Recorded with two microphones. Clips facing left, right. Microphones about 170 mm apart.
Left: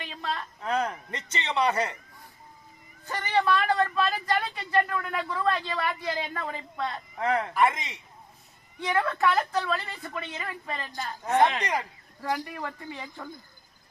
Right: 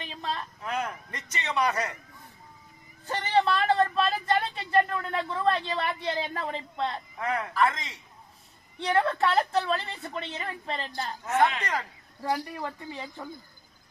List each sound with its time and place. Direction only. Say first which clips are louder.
0.0 s speech: even; 20° right (ahead or behind)
0.6 s a man's voice: left 6 dB; 35° left (ahead or behind)
3.1 s speech: even; 30° right (ahead or behind)
7.2 s a man's voice: left 2 dB; 25° left (ahead or behind)
8.8 s speech: right 1 dB; 30° right (ahead or behind)
11.3 s speech: left 2 dB; 15° left (ahead or behind)
12.5 s speech: right 1 dB; 15° right (ahead or behind)